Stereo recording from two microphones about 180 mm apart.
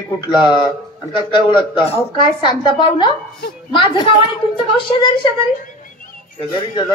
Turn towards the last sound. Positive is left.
turn(degrees=25)  # may be behind; listen again after turning